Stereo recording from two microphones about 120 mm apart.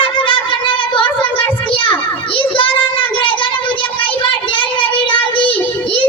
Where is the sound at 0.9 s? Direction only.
45° left (ahead or behind).